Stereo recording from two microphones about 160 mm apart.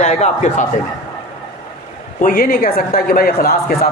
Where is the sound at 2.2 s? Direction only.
65° left (ahead or behind).